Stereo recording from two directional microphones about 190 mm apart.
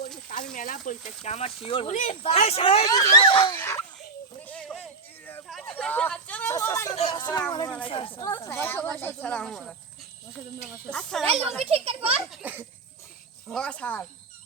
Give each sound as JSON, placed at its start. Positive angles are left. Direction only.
{"t": 0.5, "sound": "speech", "side_deg": 45}
{"t": 2.8, "sound": "speech", "side_deg": 20}
{"t": 3.5, "sound": "speech", "side_deg": 10}
{"t": 4.4, "sound": "a sound", "side_deg": 5}
{"t": 6.9, "sound": "a sound", "side_deg": 35}
{"t": 7.2, "sound": "speech", "side_deg": 20}
{"t": 8.2, "sound": "speech", "side_deg": 15}
{"t": 10.8, "sound": "speech", "side_deg": 5}
{"t": 11.6, "sound": "a child's voice", "side_deg": -30}
{"t": 12.3, "sound": "a child's voice", "side_deg": -10}
{"t": 13.5, "sound": "speech", "side_deg": 5}